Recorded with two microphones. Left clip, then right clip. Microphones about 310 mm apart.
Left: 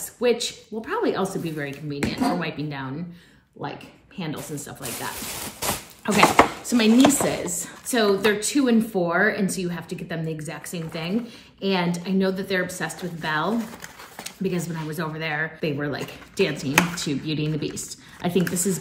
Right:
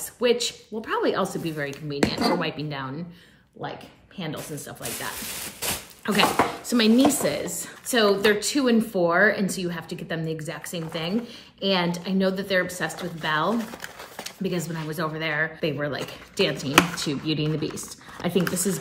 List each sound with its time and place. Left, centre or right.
0.2 s speech: centre
5.6 s a sound: left
6.0 s chopping: centre
7.5 s speech: centre